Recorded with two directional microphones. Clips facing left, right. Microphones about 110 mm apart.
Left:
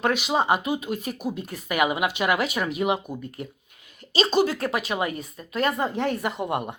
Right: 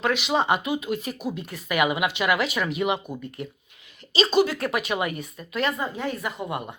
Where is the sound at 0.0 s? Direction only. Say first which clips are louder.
Even; 45° left (ahead or behind).